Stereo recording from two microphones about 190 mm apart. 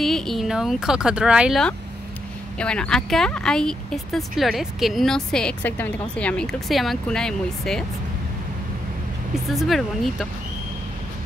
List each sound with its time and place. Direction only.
0.0 s speech: centre (ahead or behind)
9.3 s speech: centre (ahead or behind)